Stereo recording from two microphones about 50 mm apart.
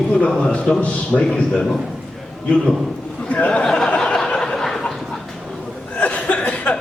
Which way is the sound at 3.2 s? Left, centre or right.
Left.